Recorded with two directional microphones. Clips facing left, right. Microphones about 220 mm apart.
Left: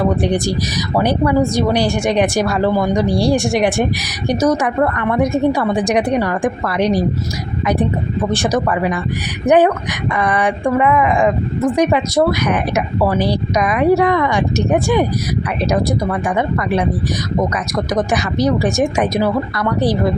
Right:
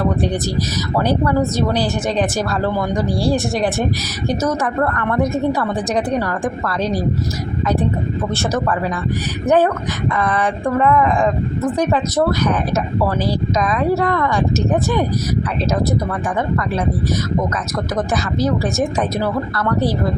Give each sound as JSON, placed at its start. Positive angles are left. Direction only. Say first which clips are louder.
{"t": 0.0, "sound": "a woman's voice", "louder": "left 3 dB", "side_deg": 15}
{"t": 8.3, "sound": "a woman's voice", "louder": "left 4 dB", "side_deg": 15}
{"t": 18.6, "sound": "a woman's voice", "louder": "left 3 dB", "side_deg": 15}